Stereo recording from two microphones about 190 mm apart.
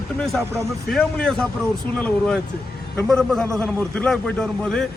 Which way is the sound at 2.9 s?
5° left (ahead or behind).